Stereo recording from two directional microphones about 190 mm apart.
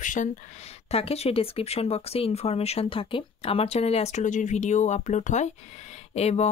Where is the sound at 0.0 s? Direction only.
45° left (ahead or behind).